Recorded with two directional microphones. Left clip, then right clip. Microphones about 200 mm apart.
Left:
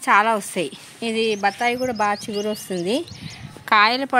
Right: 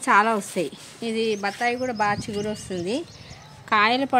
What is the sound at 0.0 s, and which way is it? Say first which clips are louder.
Speech: left 2 dB; 20° left (ahead or behind).